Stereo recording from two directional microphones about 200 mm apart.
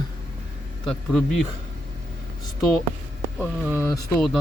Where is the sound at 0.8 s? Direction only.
Centre (ahead or behind).